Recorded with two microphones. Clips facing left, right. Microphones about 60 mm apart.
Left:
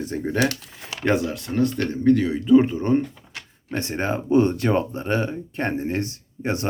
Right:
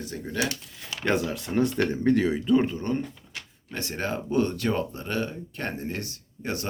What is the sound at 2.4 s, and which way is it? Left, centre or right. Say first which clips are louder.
Speech: left 7 dB; centre.